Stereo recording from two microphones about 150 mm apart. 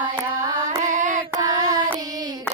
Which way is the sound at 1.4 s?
25° right (ahead or behind).